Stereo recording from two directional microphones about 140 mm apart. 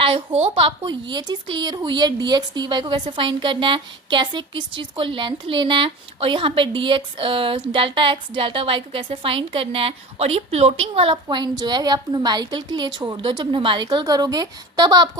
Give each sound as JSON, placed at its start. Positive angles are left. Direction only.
{"t": 0.4, "sound": "speech", "side_deg": -40}